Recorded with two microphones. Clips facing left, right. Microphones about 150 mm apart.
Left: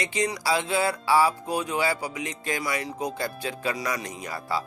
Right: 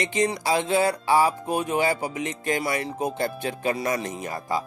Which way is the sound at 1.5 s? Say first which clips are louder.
Right 3 dB; 50° right (ahead or behind).